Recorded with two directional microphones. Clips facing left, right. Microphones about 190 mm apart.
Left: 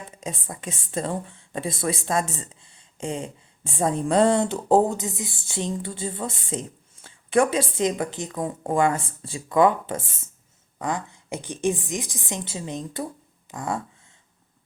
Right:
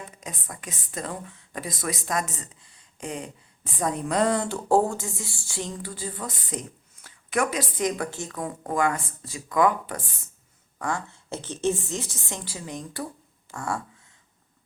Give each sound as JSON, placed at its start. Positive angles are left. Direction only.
{"t": 0.2, "sound": "a woman's voice", "side_deg": 25}